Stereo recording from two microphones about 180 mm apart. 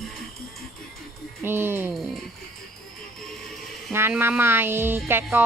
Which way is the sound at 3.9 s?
15° right (ahead or behind).